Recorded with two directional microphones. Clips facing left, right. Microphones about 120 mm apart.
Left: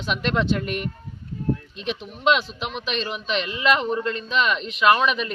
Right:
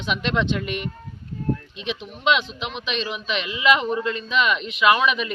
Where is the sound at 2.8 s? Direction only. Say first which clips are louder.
Right 1 dB; 40° left (ahead or behind).